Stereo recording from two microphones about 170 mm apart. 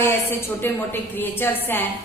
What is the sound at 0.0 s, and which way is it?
A woman's voice, 15° left (ahead or behind).